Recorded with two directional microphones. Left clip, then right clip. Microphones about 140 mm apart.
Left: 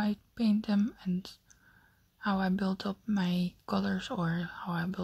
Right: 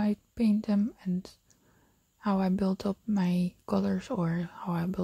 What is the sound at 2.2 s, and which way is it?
Speech, 45° right (ahead or behind).